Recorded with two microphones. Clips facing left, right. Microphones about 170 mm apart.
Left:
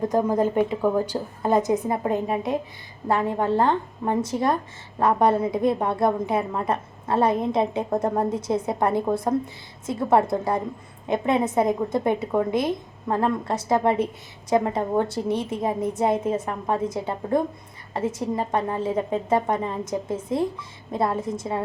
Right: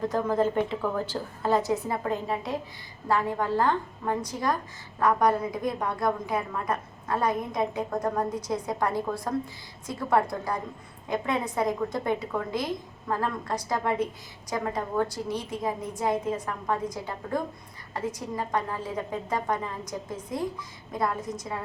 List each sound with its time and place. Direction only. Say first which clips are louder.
0.0 s a woman's voice: left 4 dB; 20° left (ahead or behind)